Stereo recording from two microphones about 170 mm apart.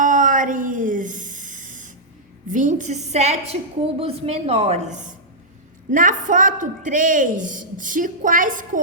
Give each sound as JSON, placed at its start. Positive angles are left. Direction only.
{"t": 0.0, "sound": "music", "side_deg": -50}
{"t": 2.5, "sound": "a woman's voice", "side_deg": -45}